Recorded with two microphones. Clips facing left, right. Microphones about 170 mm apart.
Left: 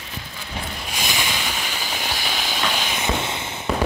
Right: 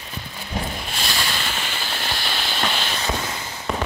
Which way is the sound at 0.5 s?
40° right (ahead or behind).